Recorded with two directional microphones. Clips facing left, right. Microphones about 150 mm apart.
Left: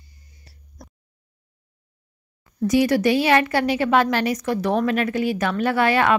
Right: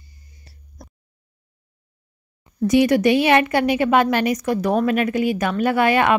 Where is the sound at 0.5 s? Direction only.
25° right (ahead or behind).